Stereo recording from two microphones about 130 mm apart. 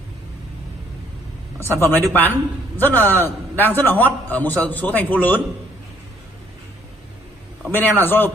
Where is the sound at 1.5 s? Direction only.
20° left (ahead or behind).